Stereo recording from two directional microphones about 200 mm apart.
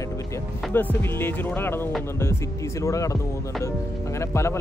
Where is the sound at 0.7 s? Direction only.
10° left (ahead or behind).